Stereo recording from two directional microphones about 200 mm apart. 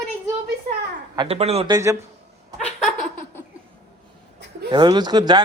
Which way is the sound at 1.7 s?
15° right (ahead or behind).